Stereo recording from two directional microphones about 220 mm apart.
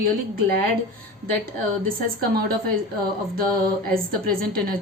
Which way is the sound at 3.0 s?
40° right (ahead or behind).